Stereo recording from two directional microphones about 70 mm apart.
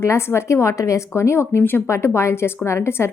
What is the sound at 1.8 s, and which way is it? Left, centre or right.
A woman's voice, left.